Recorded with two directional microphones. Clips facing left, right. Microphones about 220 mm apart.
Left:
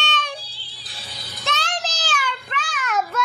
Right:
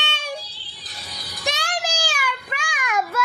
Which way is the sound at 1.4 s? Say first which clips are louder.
Right 1 dB; 10° right (ahead or behind).